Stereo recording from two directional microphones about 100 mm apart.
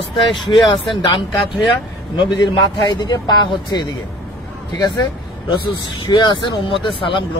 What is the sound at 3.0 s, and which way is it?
Speech, 45° left (ahead or behind).